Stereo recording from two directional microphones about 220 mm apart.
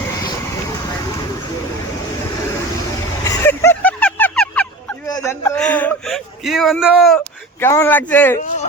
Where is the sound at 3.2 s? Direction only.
10° left (ahead or behind).